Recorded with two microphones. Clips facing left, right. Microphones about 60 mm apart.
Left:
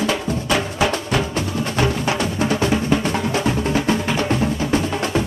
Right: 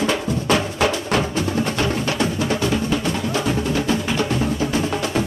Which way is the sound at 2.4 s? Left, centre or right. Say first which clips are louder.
Left 2 dB; left.